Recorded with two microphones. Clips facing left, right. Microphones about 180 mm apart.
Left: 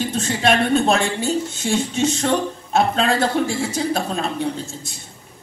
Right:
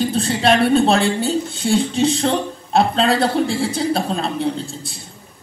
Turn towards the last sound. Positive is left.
turn(degrees=-35)  # may be behind; listen again after turning